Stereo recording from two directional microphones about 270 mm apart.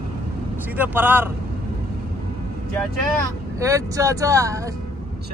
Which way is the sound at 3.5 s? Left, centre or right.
Centre.